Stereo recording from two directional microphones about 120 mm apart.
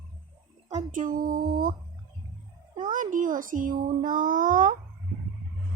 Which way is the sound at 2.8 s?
90° right.